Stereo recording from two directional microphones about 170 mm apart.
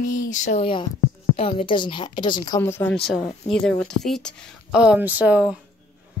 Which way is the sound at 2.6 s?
15° left (ahead or behind).